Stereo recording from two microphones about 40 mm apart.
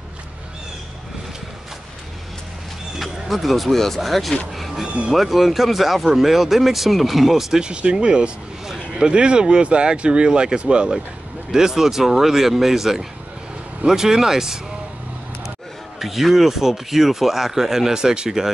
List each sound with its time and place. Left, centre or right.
3.0 s speech: centre
4.6 s a sound: centre
4.8 s speech: right
5.1 s speech: centre
7.6 s speech: right
11.5 s speech: centre
16.0 s speech: centre